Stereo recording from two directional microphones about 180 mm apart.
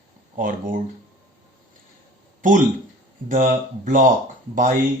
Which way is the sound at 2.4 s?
45° right (ahead or behind).